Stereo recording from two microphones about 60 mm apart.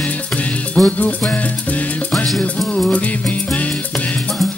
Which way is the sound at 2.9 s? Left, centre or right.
Left.